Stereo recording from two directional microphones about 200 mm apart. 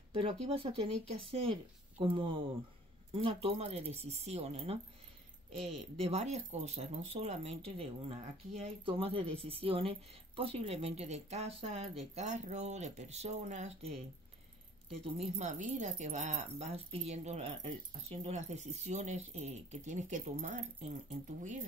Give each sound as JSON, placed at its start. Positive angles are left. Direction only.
{"t": 0.1, "sound": "speech", "side_deg": -30}
{"t": 15.1, "sound": "speech", "side_deg": -35}